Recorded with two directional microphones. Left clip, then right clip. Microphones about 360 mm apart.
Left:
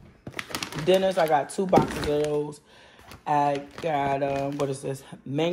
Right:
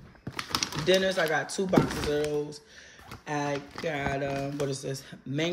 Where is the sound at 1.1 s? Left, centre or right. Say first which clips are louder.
Left 5 dB; left.